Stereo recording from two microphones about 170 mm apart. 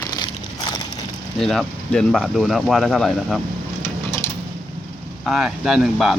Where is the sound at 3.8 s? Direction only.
15° left (ahead or behind).